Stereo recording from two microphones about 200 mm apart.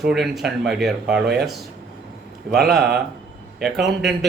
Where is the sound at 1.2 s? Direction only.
55° right (ahead or behind).